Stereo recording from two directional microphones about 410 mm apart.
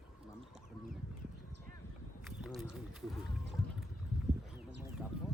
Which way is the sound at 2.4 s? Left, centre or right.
Centre.